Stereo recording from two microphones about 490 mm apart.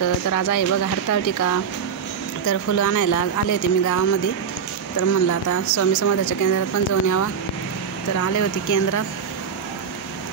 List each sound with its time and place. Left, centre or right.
0.0 s speech: left
4.9 s speech: left